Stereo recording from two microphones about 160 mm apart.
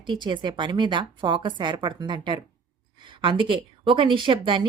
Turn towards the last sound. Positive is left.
turn(degrees=-30)  # may be behind; listen again after turning